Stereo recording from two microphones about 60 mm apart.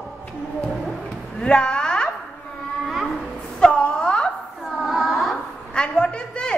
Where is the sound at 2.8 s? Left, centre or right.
Centre.